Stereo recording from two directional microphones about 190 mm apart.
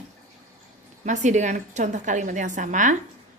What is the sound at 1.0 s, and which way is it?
A woman's voice, 40° right (ahead or behind).